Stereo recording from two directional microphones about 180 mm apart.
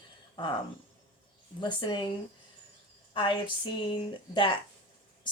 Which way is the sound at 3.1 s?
30° left (ahead or behind).